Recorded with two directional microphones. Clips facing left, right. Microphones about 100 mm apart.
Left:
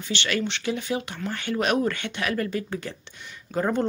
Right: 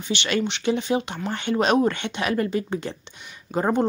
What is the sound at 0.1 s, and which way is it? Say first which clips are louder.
Speech: right 3 dB; 20° right (ahead or behind).